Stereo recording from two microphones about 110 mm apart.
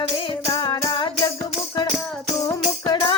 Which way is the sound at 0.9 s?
50° left (ahead or behind).